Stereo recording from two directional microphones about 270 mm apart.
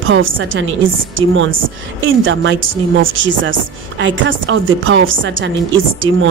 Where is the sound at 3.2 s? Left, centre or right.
Right.